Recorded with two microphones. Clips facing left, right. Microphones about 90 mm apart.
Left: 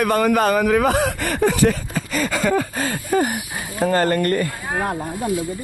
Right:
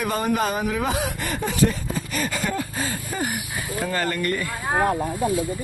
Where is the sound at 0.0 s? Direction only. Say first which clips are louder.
Left 6 dB; 80° left.